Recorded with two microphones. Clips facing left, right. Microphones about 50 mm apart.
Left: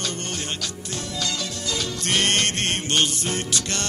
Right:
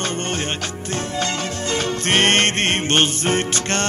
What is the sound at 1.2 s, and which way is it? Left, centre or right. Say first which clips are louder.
Music: right 5 dB; right.